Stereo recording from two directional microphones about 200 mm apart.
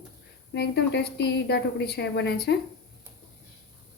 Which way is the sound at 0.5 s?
55° left (ahead or behind).